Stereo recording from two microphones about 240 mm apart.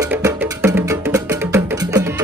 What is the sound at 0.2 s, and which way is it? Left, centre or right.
Music, centre.